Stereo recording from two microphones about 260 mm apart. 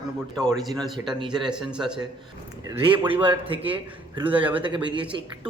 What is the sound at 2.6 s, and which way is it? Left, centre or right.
A man's voice, centre.